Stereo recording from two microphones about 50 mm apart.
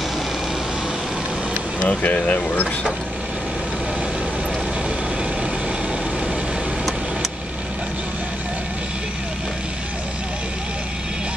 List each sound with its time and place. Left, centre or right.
1.9 s speech: left